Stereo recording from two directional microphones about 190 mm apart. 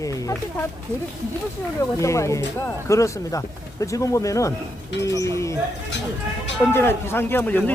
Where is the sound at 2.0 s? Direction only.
15° left (ahead or behind).